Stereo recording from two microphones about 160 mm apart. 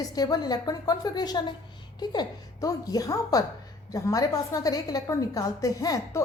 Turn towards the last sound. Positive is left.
turn(degrees=20)  # may be behind; listen again after turning